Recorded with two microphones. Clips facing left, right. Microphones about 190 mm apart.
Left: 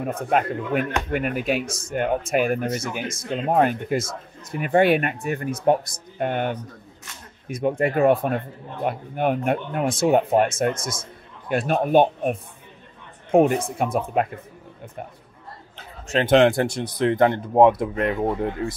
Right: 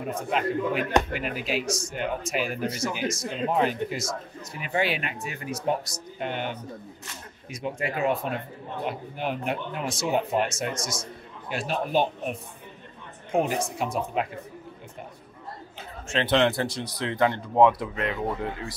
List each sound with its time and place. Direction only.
0.0 s speech: 50° left (ahead or behind)
13.6 s speech: 55° left (ahead or behind)
16.1 s speech: 45° left (ahead or behind)